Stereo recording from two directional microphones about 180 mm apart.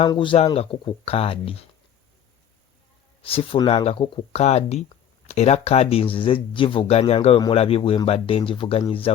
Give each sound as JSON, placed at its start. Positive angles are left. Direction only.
{"t": 0.1, "sound": "speech", "side_deg": 25}
{"t": 3.2, "sound": "speech", "side_deg": 30}